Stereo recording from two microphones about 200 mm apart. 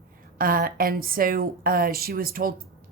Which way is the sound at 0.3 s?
45° right (ahead or behind).